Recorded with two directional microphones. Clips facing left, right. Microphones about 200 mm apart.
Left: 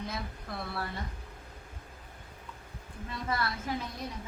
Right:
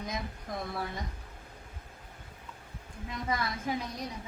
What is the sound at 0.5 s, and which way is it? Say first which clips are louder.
Speech: right 3 dB; 15° right (ahead or behind).